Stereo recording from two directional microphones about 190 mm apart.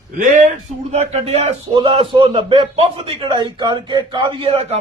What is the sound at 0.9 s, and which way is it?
Speech, 35° right (ahead or behind).